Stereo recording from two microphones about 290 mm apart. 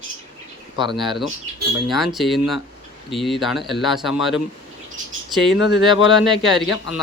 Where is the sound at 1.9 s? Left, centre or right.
Centre.